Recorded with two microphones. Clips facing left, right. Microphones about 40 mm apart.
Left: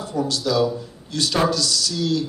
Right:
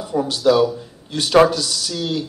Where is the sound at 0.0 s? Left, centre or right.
Right.